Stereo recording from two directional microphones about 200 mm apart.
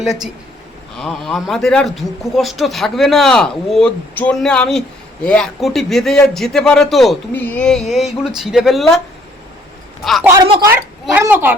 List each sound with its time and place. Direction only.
0.9 s speech: centre (ahead or behind)
10.0 s speech: centre (ahead or behind)
10.4 s speech: 25° right (ahead or behind)
11.0 s speech: 10° right (ahead or behind)